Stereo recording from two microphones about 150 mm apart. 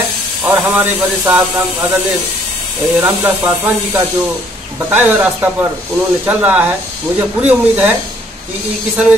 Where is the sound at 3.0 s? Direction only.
15° right (ahead or behind).